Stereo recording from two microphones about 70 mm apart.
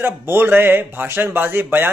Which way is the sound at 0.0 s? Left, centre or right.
Right.